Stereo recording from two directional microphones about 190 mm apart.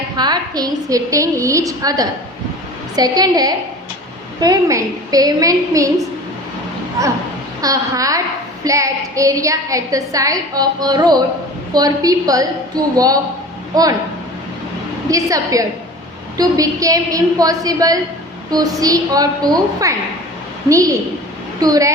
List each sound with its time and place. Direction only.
0.2 s a woman's voice: 20° right (ahead or behind)
7.6 s a woman's voice: 20° right (ahead or behind)
15.1 s a woman's voice: 15° right (ahead or behind)